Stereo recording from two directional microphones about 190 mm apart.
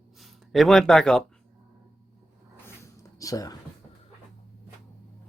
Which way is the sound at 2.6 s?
15° left (ahead or behind).